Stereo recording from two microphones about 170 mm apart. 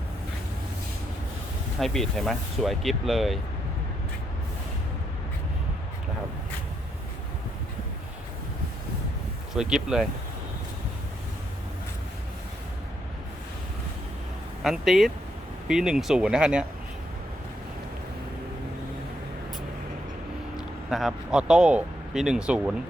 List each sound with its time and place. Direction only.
1.8 s speech: centre (ahead or behind)
9.6 s speech: 5° right (ahead or behind)
14.6 s speech: centre (ahead or behind)
20.9 s speech: centre (ahead or behind)